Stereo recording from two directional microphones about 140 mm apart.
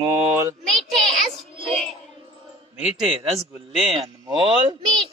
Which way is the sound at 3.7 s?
Centre (ahead or behind).